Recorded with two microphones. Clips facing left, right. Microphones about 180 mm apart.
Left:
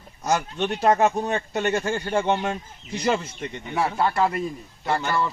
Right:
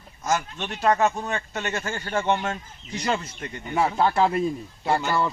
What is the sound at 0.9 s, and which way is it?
A man's voice, 20° left (ahead or behind).